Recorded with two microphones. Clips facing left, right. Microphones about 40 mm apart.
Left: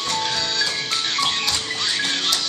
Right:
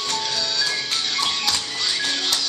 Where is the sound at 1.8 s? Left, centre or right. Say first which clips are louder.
Left 1 dB; left.